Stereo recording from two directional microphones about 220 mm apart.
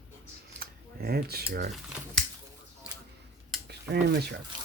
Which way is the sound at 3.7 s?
50° right (ahead or behind).